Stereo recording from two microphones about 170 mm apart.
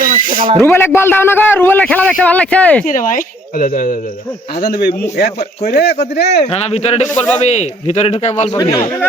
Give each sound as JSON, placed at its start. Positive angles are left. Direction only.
{"t": 0.0, "sound": "a sound", "side_deg": -55}
{"t": 0.6, "sound": "speech", "side_deg": 10}
{"t": 2.8, "sound": "speech", "side_deg": 50}
{"t": 4.6, "sound": "speech", "side_deg": 65}
{"t": 6.5, "sound": "speech", "side_deg": 35}
{"t": 8.7, "sound": "speech", "side_deg": 15}